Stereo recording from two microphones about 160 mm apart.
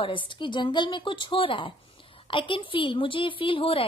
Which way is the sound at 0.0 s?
30° left (ahead or behind).